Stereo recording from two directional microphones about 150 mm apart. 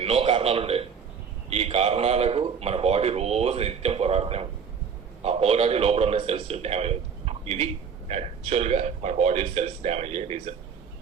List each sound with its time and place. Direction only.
0.0 s a man's voice: 40° right (ahead or behind)